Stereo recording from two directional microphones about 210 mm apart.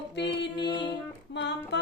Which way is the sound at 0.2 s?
55° left (ahead or behind).